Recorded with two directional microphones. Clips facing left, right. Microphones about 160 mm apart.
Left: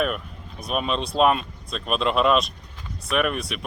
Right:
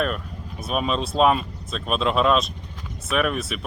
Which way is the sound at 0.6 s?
Centre (ahead or behind).